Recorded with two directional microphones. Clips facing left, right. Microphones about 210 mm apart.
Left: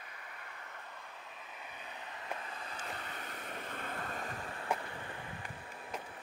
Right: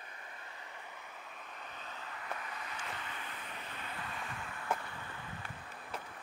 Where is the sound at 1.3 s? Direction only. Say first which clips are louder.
Right 1 dB; 10° left (ahead or behind); by 4.7 s 35° left (ahead or behind).